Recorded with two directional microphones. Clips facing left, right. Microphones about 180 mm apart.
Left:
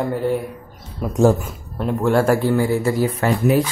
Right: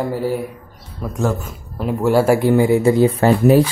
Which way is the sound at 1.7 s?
5° right (ahead or behind).